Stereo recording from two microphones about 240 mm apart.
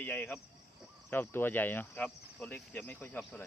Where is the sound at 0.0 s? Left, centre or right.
Centre.